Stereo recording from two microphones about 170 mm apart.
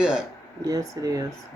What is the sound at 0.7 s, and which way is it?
Speech, 20° right (ahead or behind).